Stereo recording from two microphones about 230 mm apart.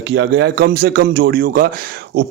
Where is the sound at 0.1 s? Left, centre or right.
Right.